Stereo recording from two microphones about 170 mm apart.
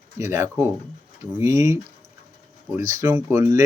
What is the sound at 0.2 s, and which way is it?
Speech, 15° right (ahead or behind).